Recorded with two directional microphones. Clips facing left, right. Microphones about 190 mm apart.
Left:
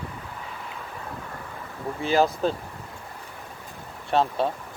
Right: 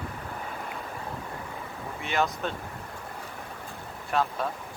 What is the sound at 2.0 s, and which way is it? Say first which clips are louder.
Speech: left 7 dB; 30° left (ahead or behind).